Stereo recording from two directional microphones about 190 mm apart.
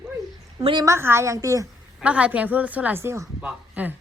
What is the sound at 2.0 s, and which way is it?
A woman's voice, 5° right (ahead or behind).